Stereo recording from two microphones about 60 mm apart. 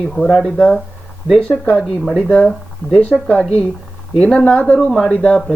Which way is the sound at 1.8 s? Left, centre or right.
Centre.